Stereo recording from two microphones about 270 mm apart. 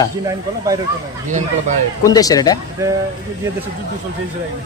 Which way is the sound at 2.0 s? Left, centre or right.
Centre.